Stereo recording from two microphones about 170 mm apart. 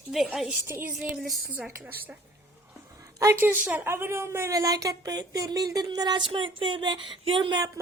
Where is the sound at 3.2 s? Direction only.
15° right (ahead or behind).